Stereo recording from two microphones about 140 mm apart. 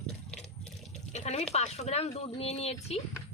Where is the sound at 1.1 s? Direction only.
55° left (ahead or behind).